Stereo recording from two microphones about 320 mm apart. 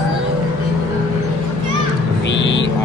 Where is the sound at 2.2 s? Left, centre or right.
Left.